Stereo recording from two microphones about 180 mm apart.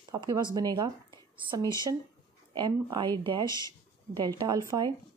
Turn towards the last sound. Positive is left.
turn(degrees=-25)  # may be behind; listen again after turning